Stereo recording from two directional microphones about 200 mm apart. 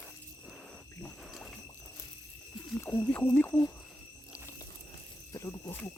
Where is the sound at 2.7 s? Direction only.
10° left (ahead or behind).